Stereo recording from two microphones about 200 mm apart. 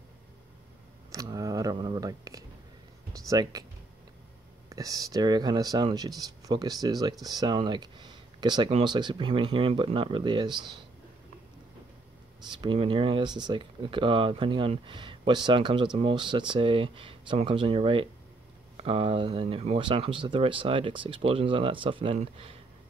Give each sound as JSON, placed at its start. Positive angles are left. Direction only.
{"t": 1.1, "sound": "a sound", "side_deg": -15}
{"t": 3.1, "sound": "speech", "side_deg": -20}
{"t": 4.6, "sound": "speech", "side_deg": -15}
{"t": 12.4, "sound": "speech", "side_deg": -25}